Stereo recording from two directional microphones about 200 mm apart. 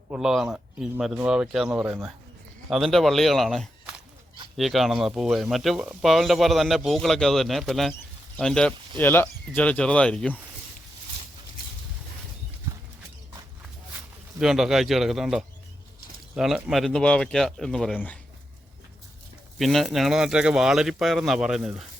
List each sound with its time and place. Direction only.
0.1 s speech: centre (ahead or behind)
1.8 s a man's voice: 15° right (ahead or behind)
2.6 s speech: centre (ahead or behind)
14.3 s speech: centre (ahead or behind)
19.5 s speech: centre (ahead or behind)